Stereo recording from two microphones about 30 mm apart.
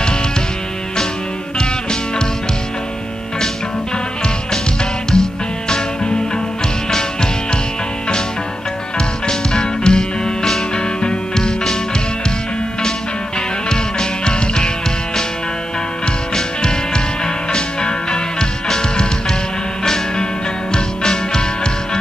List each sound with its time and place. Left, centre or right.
1.6 s music: left
5.1 s music: left
9.3 s music: left
13.7 s music: left
16.3 s music: left